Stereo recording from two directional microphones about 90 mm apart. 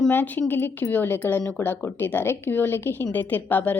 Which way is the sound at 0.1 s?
20° left (ahead or behind).